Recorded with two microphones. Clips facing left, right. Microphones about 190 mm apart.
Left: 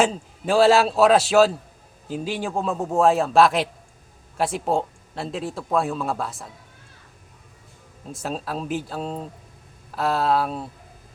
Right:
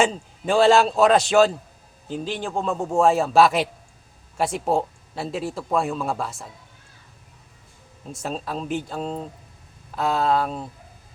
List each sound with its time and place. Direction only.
0.0 s speech: 5° left (ahead or behind)
8.1 s speech: centre (ahead or behind)